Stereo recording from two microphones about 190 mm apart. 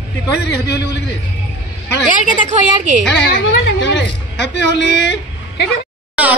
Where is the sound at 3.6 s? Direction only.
70° left (ahead or behind).